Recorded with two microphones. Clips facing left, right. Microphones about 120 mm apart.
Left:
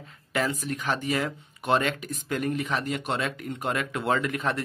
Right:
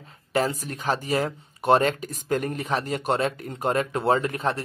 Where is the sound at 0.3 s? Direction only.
35° right (ahead or behind).